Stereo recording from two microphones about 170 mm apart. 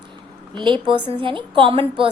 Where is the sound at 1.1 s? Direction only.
30° right (ahead or behind).